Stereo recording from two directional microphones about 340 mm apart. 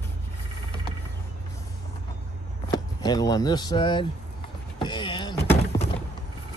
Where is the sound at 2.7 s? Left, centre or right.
Centre.